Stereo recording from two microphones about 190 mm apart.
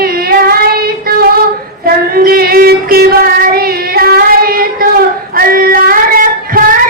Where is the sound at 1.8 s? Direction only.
50° right (ahead or behind).